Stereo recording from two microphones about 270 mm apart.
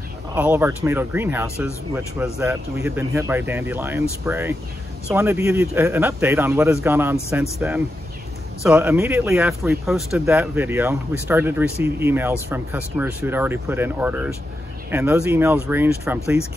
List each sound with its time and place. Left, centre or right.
0.3 s speech: centre